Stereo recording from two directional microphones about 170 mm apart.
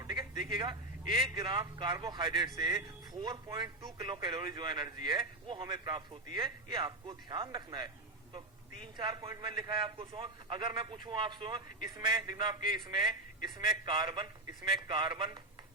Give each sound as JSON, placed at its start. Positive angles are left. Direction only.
{"t": 0.0, "sound": "a man's voice", "side_deg": -25}
{"t": 9.0, "sound": "a man's voice", "side_deg": -30}